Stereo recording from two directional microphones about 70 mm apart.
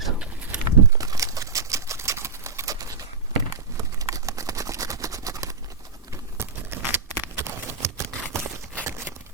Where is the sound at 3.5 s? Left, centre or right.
Right.